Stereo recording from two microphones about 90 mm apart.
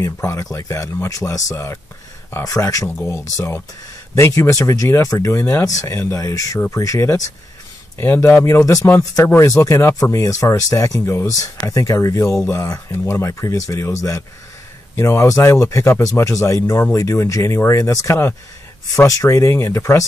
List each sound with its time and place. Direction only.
0.0 s speech: 30° left (ahead or behind)